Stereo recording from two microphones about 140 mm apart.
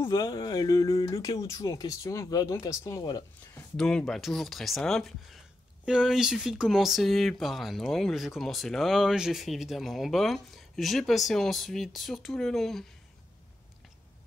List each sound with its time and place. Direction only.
0.0 s speech: 25° left (ahead or behind)
3.7 s speech: 5° left (ahead or behind)